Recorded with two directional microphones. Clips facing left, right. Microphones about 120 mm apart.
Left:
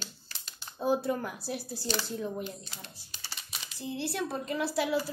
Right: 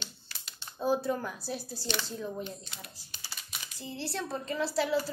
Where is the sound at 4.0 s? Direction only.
15° left (ahead or behind).